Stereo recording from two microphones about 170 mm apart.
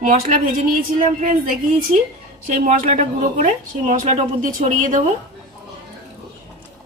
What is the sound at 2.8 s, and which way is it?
Speech, 40° right (ahead or behind).